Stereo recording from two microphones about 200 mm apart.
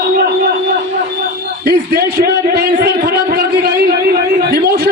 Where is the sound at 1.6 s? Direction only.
55° right (ahead or behind).